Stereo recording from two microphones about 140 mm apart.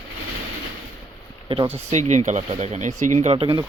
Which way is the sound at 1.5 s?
40° right (ahead or behind).